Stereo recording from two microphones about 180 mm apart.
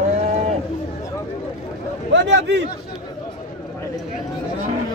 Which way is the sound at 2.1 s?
85° right.